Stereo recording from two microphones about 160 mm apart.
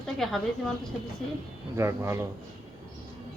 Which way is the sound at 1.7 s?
15° right (ahead or behind).